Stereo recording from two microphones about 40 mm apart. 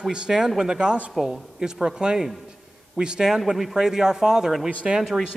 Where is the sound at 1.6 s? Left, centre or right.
Centre.